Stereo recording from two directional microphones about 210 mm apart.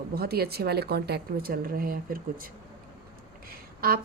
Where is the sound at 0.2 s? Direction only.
50° right (ahead or behind).